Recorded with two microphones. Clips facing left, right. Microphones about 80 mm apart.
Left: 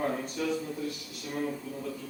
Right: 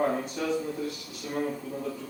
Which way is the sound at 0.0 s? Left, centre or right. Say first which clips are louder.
Right 3 dB; centre.